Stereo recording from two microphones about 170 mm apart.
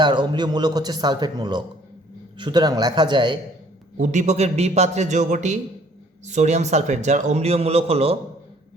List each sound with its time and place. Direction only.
0.0 s speech: 25° right (ahead or behind)
3.9 s a man's voice: 45° right (ahead or behind)